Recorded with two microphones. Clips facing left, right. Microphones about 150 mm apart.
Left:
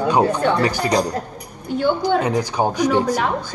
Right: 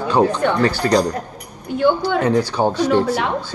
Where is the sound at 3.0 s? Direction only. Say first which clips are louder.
Right 1 dB; 40° left (ahead or behind).